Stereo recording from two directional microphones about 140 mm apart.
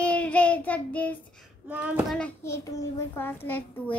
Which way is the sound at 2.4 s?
20° left (ahead or behind).